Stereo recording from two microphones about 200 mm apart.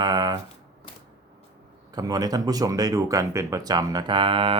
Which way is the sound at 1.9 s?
20° right (ahead or behind).